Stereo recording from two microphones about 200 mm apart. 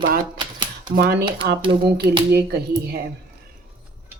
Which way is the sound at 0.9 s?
55° right (ahead or behind).